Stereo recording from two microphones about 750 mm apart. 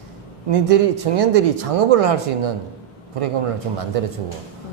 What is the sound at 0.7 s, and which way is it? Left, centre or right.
Speech, right.